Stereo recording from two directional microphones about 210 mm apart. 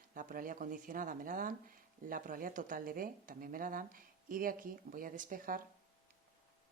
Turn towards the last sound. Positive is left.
turn(degrees=-40)  # may be behind; listen again after turning